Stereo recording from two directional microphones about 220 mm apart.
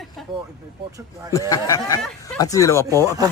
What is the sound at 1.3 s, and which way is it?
Speech, 15° left (ahead or behind).